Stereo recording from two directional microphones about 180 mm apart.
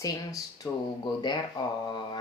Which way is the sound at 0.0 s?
20° left (ahead or behind).